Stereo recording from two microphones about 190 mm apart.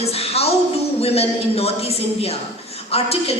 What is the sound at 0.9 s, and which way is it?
A woman's voice, 30° left (ahead or behind).